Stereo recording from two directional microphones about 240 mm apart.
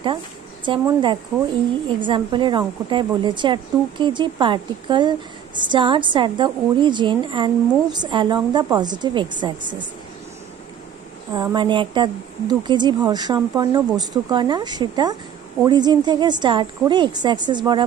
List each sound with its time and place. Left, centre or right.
0.7 s a woman's voice: centre
11.3 s a woman's voice: centre